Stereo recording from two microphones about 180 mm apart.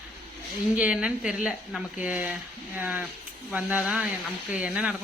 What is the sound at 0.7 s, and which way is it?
Speech, 5° right (ahead or behind).